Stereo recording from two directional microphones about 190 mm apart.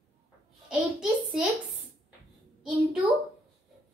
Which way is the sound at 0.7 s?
5° right (ahead or behind).